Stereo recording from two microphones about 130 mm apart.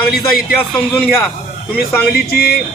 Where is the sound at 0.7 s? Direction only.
10° left (ahead or behind).